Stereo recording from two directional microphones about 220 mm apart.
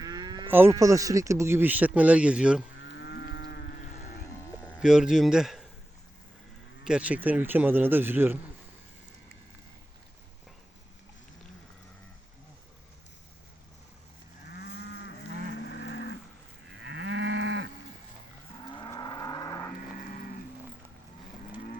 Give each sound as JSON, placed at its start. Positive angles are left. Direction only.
{"t": 0.0, "sound": "speech", "side_deg": -15}
{"t": 2.8, "sound": "moo", "side_deg": 50}
{"t": 4.7, "sound": "a man's voice", "side_deg": -5}
{"t": 6.8, "sound": "speech", "side_deg": -5}
{"t": 14.4, "sound": "moo", "side_deg": 50}
{"t": 15.6, "sound": "livestock", "side_deg": 55}
{"t": 16.7, "sound": "moo", "side_deg": -55}
{"t": 18.7, "sound": "a sound", "side_deg": 20}